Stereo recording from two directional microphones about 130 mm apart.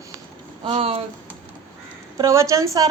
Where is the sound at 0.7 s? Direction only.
50° right (ahead or behind).